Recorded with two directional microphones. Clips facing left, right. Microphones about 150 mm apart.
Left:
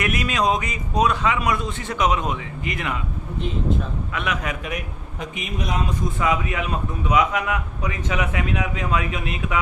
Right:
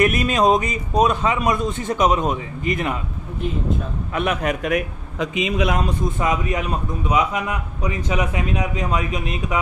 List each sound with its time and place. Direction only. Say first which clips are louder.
0.0 s a man's voice: right 5 dB; 45° right (ahead or behind)
4.1 s a man's voice: right 7 dB; 45° right (ahead or behind)
5.2 s a man's voice: right 9 dB; 90° right
6.2 s a man's voice: even; 40° right (ahead or behind)